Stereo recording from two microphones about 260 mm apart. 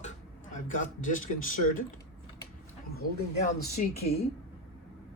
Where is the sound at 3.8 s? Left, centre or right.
Left.